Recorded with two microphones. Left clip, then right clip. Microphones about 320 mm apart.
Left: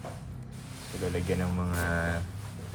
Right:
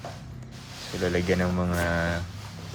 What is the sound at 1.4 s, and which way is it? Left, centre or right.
Speech, centre.